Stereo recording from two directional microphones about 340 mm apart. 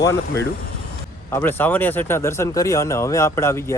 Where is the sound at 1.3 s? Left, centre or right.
Centre.